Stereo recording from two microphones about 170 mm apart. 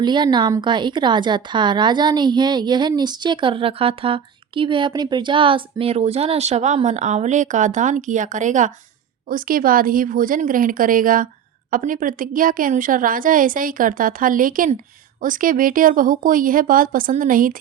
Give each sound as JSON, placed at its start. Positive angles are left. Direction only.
{"t": 0.0, "sound": "a woman's voice", "side_deg": -25}